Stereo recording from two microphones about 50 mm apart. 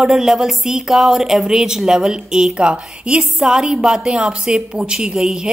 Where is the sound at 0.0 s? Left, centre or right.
Centre.